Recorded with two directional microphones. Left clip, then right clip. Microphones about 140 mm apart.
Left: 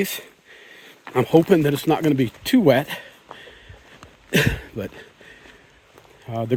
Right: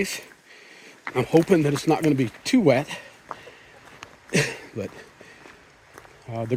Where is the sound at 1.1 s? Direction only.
90° left.